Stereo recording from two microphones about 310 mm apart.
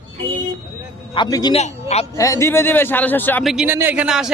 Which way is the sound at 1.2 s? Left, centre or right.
Centre.